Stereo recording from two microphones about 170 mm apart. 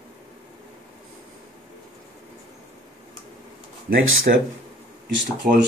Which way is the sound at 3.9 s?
55° right (ahead or behind).